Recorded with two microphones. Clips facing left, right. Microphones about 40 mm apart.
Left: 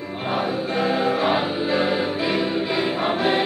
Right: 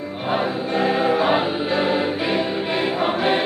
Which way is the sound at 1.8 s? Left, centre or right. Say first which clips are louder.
Right 2 dB; right.